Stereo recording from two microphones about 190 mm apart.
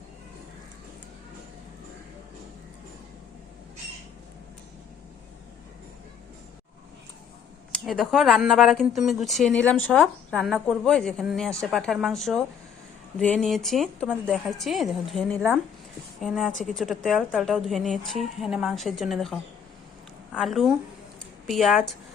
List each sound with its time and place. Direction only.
7.9 s a woman's voice: centre (ahead or behind)